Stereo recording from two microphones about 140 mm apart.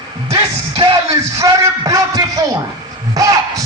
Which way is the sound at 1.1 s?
25° right (ahead or behind).